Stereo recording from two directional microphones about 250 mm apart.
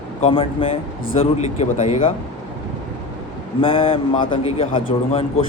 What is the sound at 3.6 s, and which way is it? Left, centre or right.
A man's voice, centre.